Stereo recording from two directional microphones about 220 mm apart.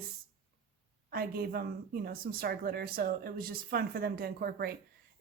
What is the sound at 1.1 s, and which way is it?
Speech, 45° right (ahead or behind).